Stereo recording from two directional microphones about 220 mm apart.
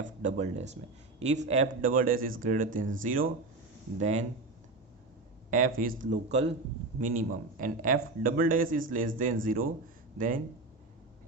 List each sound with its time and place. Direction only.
0.0 s a man's voice: 35° right (ahead or behind)
5.5 s a man's voice: 35° right (ahead or behind)